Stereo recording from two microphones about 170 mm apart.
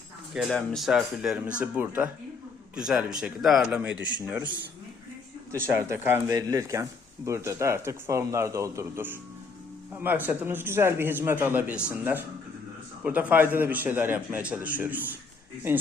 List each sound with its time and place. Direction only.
0.3 s speech: 5° left (ahead or behind)
5.5 s a man's voice: 15° right (ahead or behind)